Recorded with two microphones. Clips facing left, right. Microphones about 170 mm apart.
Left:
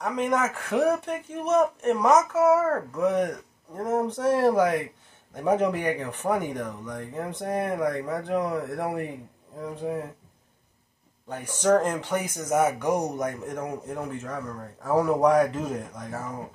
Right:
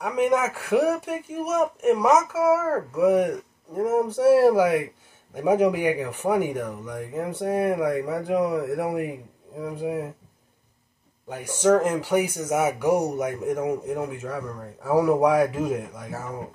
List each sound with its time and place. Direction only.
0.0 s speech: 10° right (ahead or behind)
11.2 s speech: 10° right (ahead or behind)